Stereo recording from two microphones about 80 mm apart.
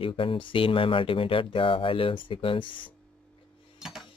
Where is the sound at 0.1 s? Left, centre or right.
Left.